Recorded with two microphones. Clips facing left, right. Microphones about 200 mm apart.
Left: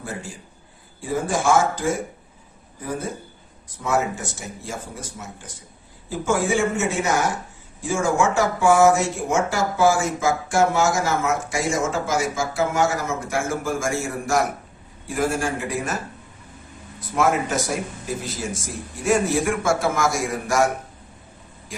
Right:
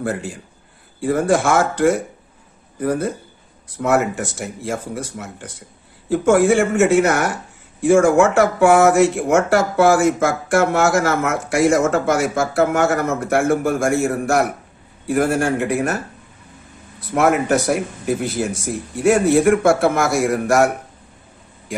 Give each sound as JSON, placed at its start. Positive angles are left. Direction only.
{"t": 0.0, "sound": "speech", "side_deg": -60}
{"t": 17.1, "sound": "speech", "side_deg": -65}